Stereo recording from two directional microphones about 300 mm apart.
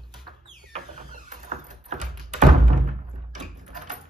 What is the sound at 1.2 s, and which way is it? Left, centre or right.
Door, right.